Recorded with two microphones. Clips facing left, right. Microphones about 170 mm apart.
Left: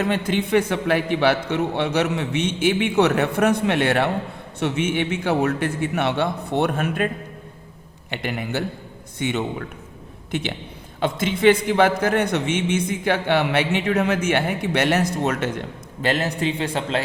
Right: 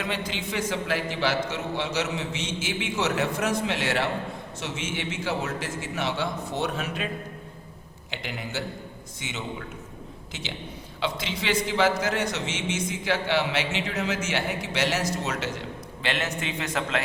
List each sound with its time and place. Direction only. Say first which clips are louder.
0.3 s a man's voice: left 10 dB; 60° left (ahead or behind)
8.1 s a man's voice: left 7 dB; 55° left (ahead or behind); by 17.0 s 30° left (ahead or behind)